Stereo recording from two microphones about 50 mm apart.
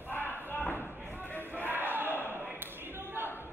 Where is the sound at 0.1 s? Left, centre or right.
Left.